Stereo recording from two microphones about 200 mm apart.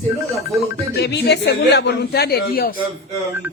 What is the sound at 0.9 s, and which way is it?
Speech, 55° left (ahead or behind).